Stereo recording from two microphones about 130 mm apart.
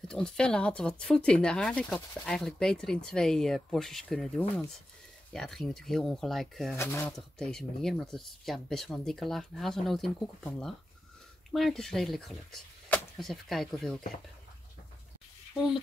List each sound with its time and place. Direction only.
0.1 s speech: 5° left (ahead or behind)
6.8 s speech: 20° left (ahead or behind)
7.1 s speech: 5° left (ahead or behind)